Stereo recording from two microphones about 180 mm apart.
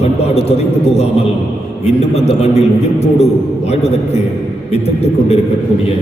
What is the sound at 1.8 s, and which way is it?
A man's voice, 35° left (ahead or behind).